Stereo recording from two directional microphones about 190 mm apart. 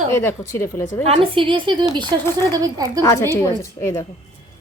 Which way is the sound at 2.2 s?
15° left (ahead or behind).